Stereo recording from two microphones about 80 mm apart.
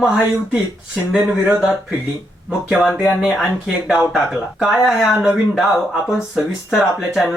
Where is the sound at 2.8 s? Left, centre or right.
Centre.